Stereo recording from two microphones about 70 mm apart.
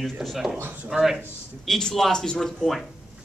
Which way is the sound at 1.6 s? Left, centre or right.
Centre.